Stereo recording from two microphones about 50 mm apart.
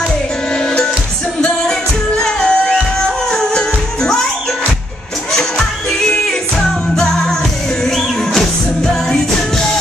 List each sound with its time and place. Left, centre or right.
0.5 s music: centre
5.3 s music: centre